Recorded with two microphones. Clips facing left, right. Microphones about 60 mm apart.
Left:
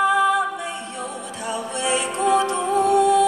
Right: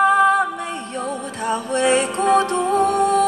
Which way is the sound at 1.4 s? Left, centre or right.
Right.